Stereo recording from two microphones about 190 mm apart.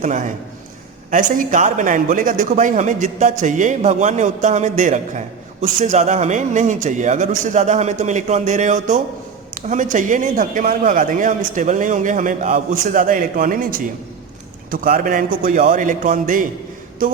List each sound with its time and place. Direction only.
0.0 s a man's voice: 40° right (ahead or behind)